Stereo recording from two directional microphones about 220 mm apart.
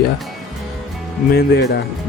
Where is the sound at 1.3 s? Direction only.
45° left (ahead or behind).